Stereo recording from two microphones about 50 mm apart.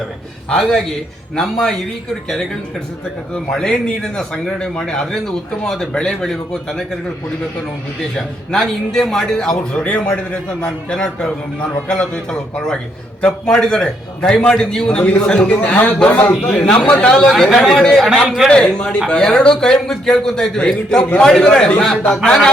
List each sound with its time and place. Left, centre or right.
0.5 s a man's voice: centre
3.5 s a man's voice: centre
4.2 s a man's voice: centre
8.6 s a man's voice: centre
9.7 s a man's voice: left
17.3 s speech: centre
18.4 s a man's voice: centre